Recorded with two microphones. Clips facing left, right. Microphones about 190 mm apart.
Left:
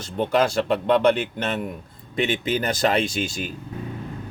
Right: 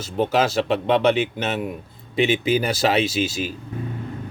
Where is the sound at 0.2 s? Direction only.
5° right (ahead or behind).